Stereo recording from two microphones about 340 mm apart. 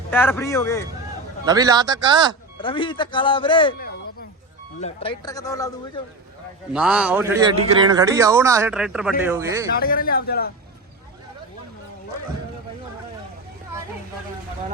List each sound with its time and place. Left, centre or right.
0.1 s speech: centre
1.5 s speech: centre
2.6 s speech: centre
4.8 s speech: centre
6.7 s a man's voice: centre
9.7 s a man's voice: left